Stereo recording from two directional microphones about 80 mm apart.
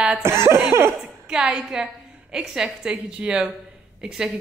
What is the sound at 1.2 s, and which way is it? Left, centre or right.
Speech, centre.